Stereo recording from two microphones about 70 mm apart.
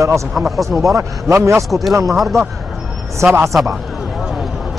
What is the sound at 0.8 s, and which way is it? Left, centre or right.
Speech, right.